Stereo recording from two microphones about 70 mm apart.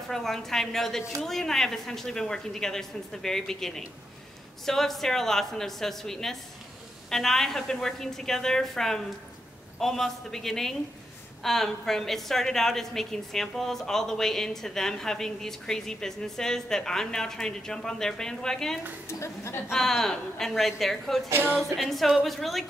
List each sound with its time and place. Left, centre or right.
0.1 s a woman's voice: centre
19.0 s a woman's voice: left
19.7 s a woman's voice: centre
21.3 s music: right
21.7 s a woman's voice: centre